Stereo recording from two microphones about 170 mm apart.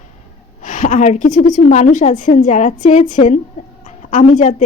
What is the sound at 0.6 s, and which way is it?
A woman's voice, 50° left (ahead or behind).